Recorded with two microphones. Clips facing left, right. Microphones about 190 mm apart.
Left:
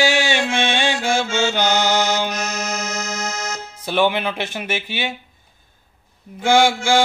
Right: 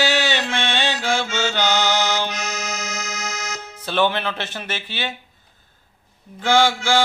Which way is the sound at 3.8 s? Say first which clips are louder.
Left 2 dB; 15° left (ahead or behind).